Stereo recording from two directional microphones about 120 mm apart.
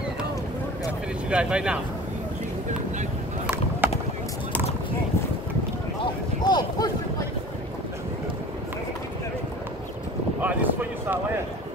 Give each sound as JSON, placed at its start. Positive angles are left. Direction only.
{"t": 1.3, "sound": "speech", "side_deg": -10}
{"t": 3.8, "sound": "a sound", "side_deg": -15}
{"t": 6.4, "sound": "boat", "side_deg": 35}
{"t": 10.4, "sound": "speech", "side_deg": -15}